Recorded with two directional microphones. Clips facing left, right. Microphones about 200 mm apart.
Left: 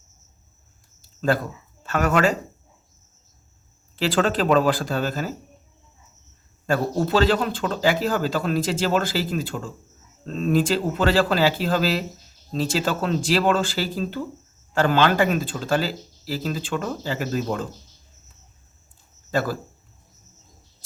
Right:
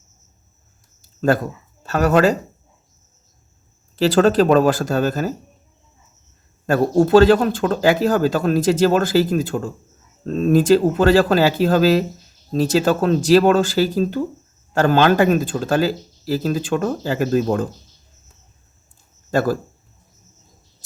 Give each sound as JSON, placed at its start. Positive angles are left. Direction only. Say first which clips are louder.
{"t": 1.0, "sound": "a sound", "louder": "right 5 dB", "side_deg": -45}
{"t": 1.8, "sound": "speech", "louder": "right 5 dB", "side_deg": -40}
{"t": 3.9, "sound": "speech", "louder": "right 8 dB", "side_deg": -40}
{"t": 6.7, "sound": "speech", "louder": "right 7 dB", "side_deg": -45}
{"t": 19.3, "sound": "speech", "louder": "right 6 dB", "side_deg": -45}